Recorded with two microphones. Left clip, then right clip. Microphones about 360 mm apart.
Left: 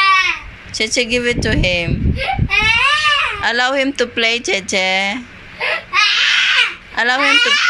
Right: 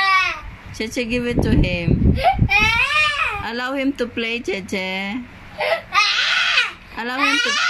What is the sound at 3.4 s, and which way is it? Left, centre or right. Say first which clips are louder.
Speech: left 8 dB; centre.